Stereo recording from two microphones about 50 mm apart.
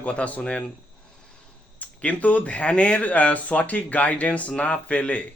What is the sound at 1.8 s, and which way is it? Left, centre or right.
Speech, left.